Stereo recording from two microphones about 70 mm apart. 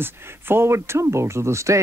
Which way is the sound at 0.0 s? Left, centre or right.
Right.